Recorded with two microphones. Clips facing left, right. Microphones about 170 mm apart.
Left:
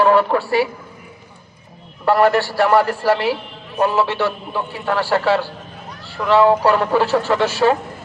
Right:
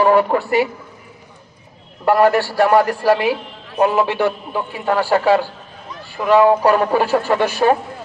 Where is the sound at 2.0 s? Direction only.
15° right (ahead or behind).